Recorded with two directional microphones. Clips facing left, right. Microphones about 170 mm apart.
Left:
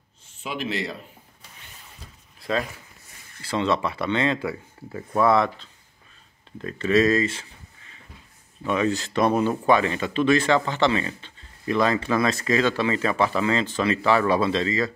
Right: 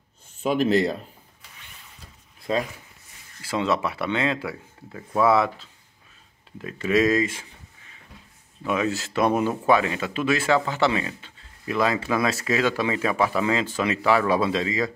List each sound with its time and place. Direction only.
0.4 s speech: 45° right (ahead or behind)
3.4 s speech: 5° right (ahead or behind)
8.6 s speech: 5° right (ahead or behind)